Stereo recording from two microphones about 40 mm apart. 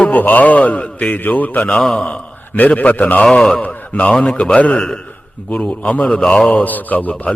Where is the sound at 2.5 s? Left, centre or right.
Left.